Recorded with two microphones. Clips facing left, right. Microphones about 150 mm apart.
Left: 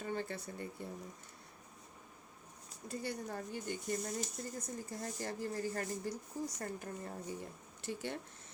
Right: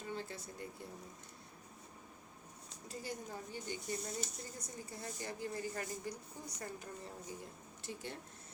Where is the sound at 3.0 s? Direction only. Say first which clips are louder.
Left 3 dB; 65° left (ahead or behind).